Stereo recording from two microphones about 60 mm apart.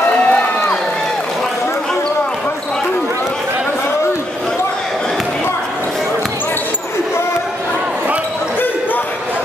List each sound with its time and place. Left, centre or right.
0.3 s crowd: left